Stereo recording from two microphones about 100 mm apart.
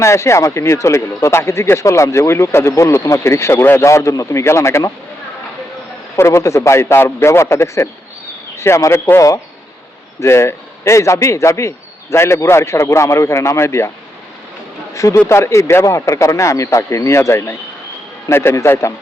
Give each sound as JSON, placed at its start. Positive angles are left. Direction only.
{"t": 0.0, "sound": "speech", "side_deg": 30}
{"t": 6.1, "sound": "speech", "side_deg": 30}
{"t": 14.9, "sound": "speech", "side_deg": 30}